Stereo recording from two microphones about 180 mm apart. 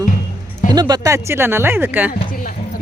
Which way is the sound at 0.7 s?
20° right (ahead or behind).